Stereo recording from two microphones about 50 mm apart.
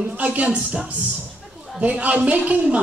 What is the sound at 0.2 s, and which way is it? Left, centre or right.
Speech, right.